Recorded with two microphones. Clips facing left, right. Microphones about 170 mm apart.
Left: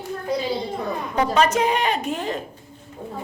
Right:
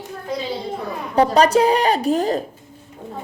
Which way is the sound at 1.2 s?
35° right (ahead or behind).